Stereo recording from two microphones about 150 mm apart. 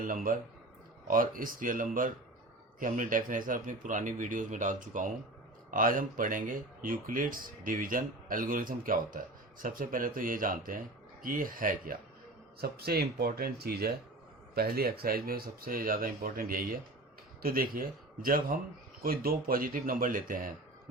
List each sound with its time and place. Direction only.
0.0 s speech: 65° right (ahead or behind)
12.5 s speech: 90° right; by 20.5 s 65° right (ahead or behind)